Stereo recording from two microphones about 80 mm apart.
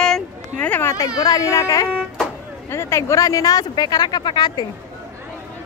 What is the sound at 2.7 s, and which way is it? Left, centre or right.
Speech, left.